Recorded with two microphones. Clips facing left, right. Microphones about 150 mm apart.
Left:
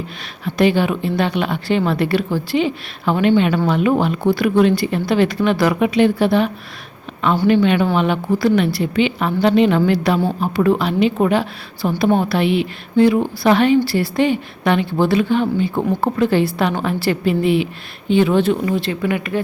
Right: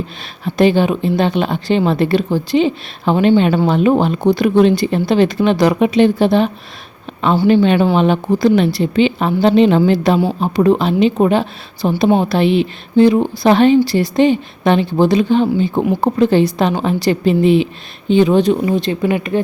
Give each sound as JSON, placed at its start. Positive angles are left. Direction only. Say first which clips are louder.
{"t": 0.4, "sound": "a woman's voice", "louder": "right 3 dB", "side_deg": -30}